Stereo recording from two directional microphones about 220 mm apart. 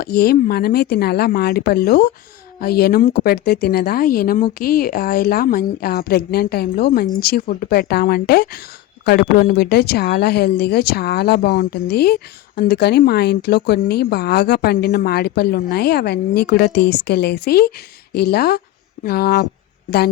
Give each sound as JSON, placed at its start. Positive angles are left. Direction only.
{"t": 0.0, "sound": "speech", "side_deg": 45}